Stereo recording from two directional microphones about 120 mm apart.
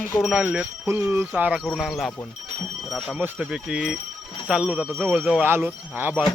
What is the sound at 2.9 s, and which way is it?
Speech, 10° right (ahead or behind).